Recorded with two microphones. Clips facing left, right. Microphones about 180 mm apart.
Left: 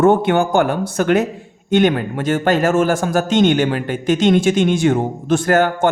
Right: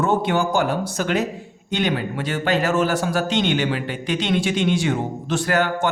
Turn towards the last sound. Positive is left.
turn(degrees=50)  # may be behind; listen again after turning